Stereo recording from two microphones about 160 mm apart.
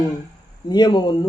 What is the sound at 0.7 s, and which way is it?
Speech, 25° left (ahead or behind).